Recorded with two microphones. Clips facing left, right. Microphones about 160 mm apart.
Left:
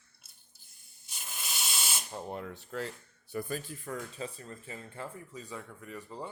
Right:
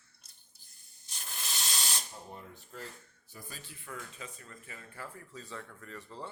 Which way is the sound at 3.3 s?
60° left (ahead or behind).